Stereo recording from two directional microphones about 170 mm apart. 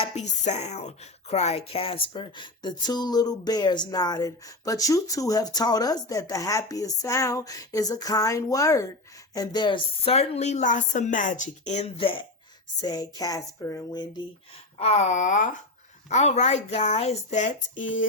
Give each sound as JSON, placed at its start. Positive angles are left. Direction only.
{"t": 0.0, "sound": "speech", "side_deg": 40}
{"t": 14.8, "sound": "speech", "side_deg": 40}